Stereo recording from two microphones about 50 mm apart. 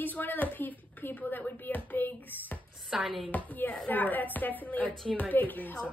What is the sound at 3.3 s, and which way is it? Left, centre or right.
Speech, left.